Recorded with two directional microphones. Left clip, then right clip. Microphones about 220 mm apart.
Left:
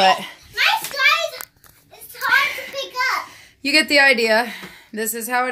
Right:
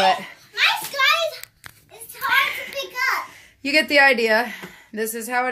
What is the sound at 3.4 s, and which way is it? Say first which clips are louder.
Speech: left 4 dB; 5° left (ahead or behind).